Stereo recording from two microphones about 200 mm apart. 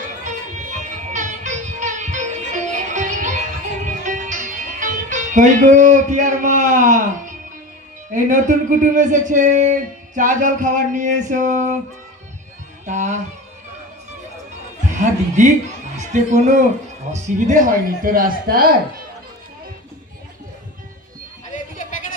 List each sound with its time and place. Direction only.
0.3 s music: 35° right (ahead or behind)
8.1 s speech: 40° right (ahead or behind)
12.8 s speech: 35° right (ahead or behind)
14.8 s chuckle: 40° right (ahead or behind)
16.0 s speech: 35° right (ahead or behind)
21.8 s a sound: 40° left (ahead or behind)